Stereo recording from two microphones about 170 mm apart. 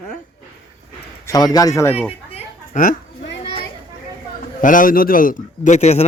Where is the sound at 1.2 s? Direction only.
20° left (ahead or behind).